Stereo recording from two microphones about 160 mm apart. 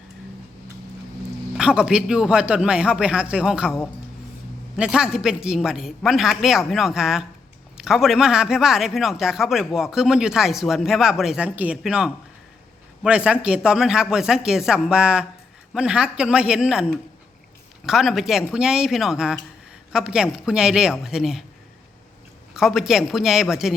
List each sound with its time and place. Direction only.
1.5 s speech: 5° right (ahead or behind)
4.8 s speech: 5° right (ahead or behind)
22.5 s speech: 5° right (ahead or behind)